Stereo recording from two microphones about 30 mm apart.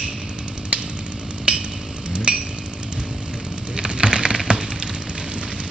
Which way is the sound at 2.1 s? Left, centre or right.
Right.